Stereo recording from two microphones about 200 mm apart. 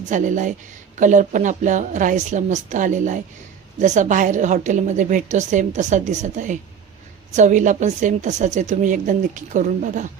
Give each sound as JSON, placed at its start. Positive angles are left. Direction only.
{"t": 0.0, "sound": "a woman's voice", "side_deg": -40}